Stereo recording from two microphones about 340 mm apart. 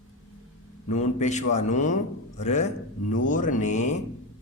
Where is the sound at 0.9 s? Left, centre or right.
Left.